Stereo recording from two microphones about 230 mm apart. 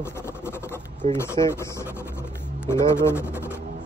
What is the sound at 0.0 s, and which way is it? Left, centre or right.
Writing, centre.